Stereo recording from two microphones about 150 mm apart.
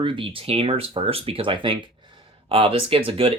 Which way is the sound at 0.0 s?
35° right (ahead or behind).